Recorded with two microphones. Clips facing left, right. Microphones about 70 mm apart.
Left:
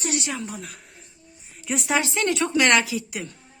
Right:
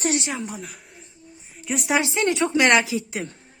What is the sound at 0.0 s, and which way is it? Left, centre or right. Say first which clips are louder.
Speech: right 3 dB; right.